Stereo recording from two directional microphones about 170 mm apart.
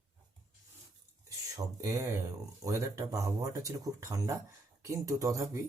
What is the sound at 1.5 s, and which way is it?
Speech, 20° right (ahead or behind).